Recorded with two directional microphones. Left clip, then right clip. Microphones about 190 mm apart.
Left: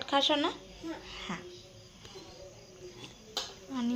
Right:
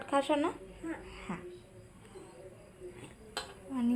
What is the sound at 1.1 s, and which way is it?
Babbling, 5° right (ahead or behind).